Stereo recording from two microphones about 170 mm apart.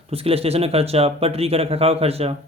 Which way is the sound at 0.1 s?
35° right (ahead or behind).